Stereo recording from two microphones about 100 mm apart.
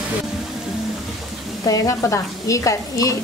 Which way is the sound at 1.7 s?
30° left (ahead or behind).